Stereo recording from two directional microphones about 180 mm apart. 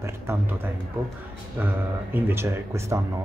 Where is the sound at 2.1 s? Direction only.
10° right (ahead or behind).